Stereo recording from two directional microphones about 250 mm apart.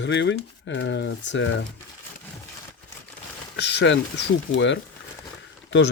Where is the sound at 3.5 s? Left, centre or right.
Left.